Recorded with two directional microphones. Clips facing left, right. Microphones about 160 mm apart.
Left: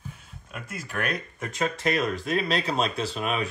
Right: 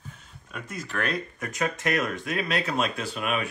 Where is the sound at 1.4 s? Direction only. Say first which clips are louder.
Left 2 dB; 30° left (ahead or behind).